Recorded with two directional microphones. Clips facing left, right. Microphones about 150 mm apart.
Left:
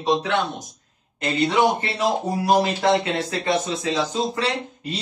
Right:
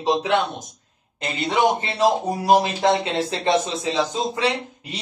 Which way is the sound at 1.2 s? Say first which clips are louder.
Left 1 dB; 20° right (ahead or behind).